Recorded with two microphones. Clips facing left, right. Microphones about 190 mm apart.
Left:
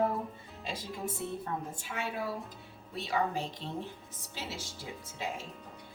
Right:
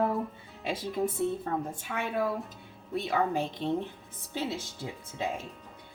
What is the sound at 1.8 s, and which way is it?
A woman's voice, 60° right (ahead or behind).